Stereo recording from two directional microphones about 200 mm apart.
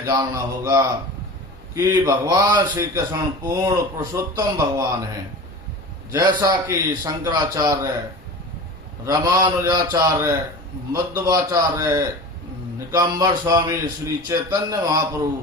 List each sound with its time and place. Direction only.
0.0 s a man's voice: 20° right (ahead or behind)
6.1 s a man's voice: 20° right (ahead or behind)
9.0 s a man's voice: 20° right (ahead or behind)